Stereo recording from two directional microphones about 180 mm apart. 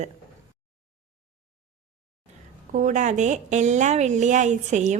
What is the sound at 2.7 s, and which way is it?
A woman's voice, 45° right (ahead or behind).